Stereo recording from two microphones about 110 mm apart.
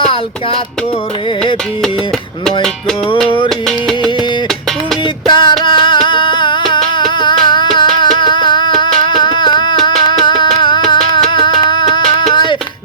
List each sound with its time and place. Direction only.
5.3 s music: 45° left (ahead or behind)
11.3 s a sound: 45° left (ahead or behind)
12.1 s music: 45° left (ahead or behind)